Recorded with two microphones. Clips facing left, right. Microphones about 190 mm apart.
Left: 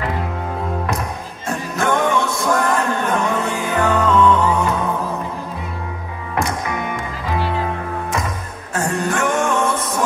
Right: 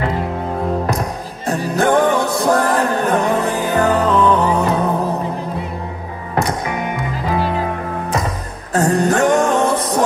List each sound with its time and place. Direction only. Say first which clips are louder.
1.5 s music: right 5 dB; 35° right (ahead or behind)
8.7 s music: right 6 dB; 35° right (ahead or behind)